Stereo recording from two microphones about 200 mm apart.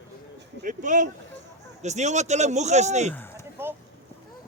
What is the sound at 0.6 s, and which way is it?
Speech, 40° right (ahead or behind).